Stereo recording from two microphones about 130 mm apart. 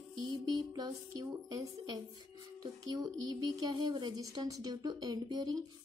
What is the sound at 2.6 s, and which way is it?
Speech, 30° right (ahead or behind).